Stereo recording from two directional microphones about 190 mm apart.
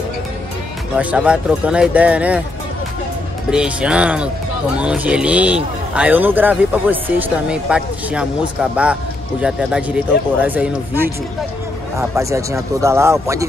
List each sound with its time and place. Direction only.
0.9 s speech: 5° right (ahead or behind)
3.4 s speech: 5° right (ahead or behind)
12.2 s speech: 15° right (ahead or behind)